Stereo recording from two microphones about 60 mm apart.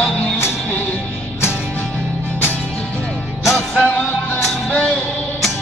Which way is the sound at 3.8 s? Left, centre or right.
Centre.